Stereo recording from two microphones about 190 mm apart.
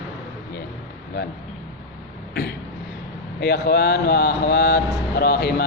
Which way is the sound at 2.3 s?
55° left (ahead or behind).